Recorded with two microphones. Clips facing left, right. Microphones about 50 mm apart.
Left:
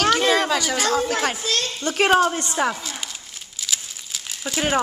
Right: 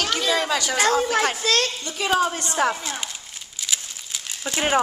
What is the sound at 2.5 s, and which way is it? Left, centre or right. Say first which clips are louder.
Crumpling: right 1 dB; centre.